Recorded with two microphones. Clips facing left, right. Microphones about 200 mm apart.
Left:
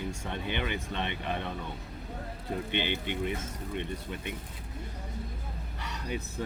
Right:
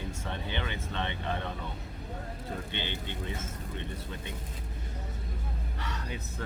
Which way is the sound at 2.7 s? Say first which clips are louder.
Left 6 dB; 15° left (ahead or behind).